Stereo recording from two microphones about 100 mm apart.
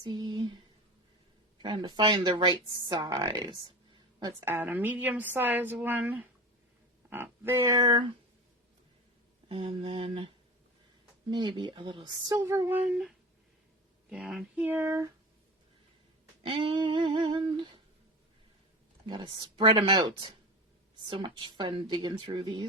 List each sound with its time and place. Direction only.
0.0 s speech: 50° right (ahead or behind)
4.4 s a woman's voice: 20° right (ahead or behind)
7.7 s speech: 45° right (ahead or behind)
9.5 s humming: 65° right (ahead or behind)
11.3 s speech: 50° right (ahead or behind)
12.3 s a woman's voice: 30° right (ahead or behind)
12.9 s speech: 5° right (ahead or behind)
14.5 s a woman's voice: 15° right (ahead or behind)
16.4 s humming: 55° right (ahead or behind)
19.0 s speech: 50° right (ahead or behind)